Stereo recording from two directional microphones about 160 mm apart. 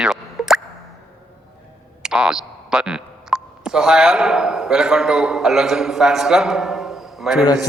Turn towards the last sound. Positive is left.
turn(degrees=0)  # may be behind; listen again after turning